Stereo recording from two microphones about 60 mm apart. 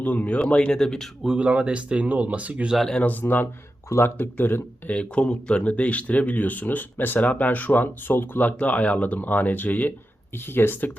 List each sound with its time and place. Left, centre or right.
0.0 s speech: left
1.4 s speech: centre
2.9 s speech: left
3.4 s speech: left
4.9 s speech: centre; by 10.9 s left